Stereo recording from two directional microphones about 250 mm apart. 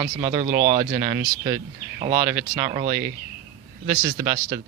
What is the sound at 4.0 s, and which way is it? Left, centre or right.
Speech, centre.